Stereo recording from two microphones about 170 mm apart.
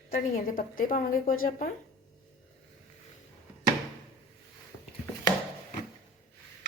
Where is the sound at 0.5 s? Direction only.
55° left (ahead or behind).